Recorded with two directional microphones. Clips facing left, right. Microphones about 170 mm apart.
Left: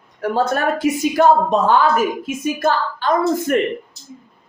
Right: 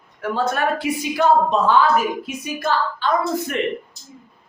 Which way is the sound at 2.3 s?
45° left (ahead or behind).